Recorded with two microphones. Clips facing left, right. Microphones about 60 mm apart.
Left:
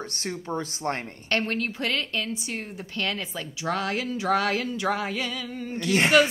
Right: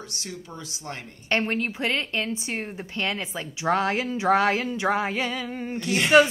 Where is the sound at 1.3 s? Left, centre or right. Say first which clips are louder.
Right 2 dB; centre.